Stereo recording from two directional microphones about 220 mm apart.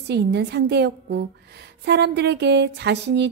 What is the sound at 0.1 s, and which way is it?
A woman's voice, 50° right (ahead or behind).